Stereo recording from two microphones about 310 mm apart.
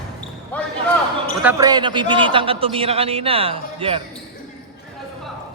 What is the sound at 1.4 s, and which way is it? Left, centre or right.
A man's voice, centre.